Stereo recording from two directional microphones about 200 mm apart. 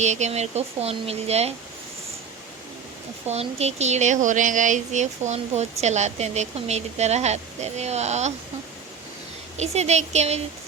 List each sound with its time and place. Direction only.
0.0 s speech: 35° right (ahead or behind)
3.2 s speech: 30° right (ahead or behind)
9.6 s speech: 35° right (ahead or behind)